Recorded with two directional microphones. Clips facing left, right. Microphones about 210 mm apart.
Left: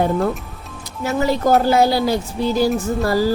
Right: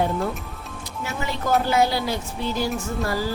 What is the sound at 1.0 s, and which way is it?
Speech, 40° left (ahead or behind).